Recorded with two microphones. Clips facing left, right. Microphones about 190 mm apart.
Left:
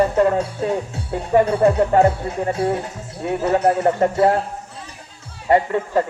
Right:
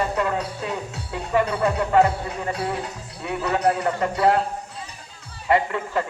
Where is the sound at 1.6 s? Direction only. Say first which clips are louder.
Left 5 dB; 45° left (ahead or behind).